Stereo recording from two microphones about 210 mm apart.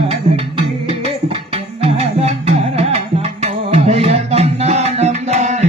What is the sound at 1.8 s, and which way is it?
Music, 30° right (ahead or behind).